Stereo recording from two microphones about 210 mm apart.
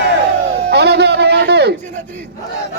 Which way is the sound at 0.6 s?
50° right (ahead or behind).